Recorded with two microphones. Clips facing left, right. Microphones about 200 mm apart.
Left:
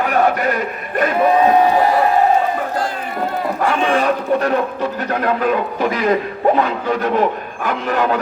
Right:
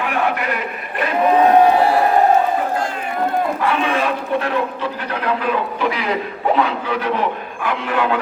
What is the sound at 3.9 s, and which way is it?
Speech, 40° left (ahead or behind).